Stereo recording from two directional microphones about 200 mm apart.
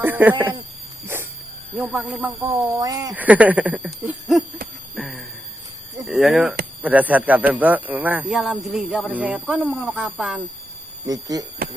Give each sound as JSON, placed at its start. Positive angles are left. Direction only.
{"t": 0.0, "sound": "speech", "side_deg": -10}
{"t": 1.0, "sound": "a sound", "side_deg": -10}
{"t": 1.7, "sound": "speech", "side_deg": -5}
{"t": 4.9, "sound": "a sound", "side_deg": 0}
{"t": 6.1, "sound": "speech", "side_deg": 0}
{"t": 11.0, "sound": "speech", "side_deg": -20}